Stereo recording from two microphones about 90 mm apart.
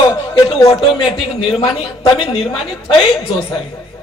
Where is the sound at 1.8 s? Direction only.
90° left.